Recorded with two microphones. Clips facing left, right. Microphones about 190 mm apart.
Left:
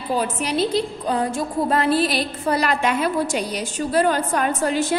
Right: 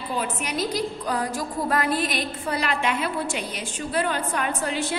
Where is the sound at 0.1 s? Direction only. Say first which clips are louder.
Left 6 dB; 35° left (ahead or behind).